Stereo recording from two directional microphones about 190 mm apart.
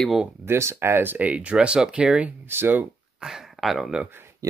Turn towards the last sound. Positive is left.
turn(degrees=-10)  # may be behind; listen again after turning